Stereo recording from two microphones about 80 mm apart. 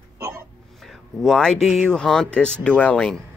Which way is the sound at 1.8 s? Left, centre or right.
Centre.